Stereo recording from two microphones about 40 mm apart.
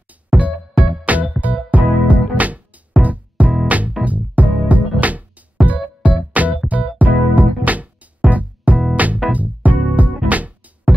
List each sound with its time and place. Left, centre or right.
0.1 s music: right